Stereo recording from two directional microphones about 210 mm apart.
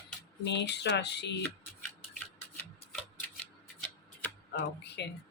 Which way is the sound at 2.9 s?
5° left (ahead or behind).